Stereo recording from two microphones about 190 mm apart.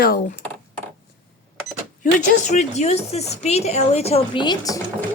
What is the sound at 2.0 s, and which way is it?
Speech, 40° left (ahead or behind).